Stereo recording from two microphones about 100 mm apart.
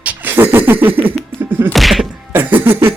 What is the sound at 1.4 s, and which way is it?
Whack, 20° right (ahead or behind).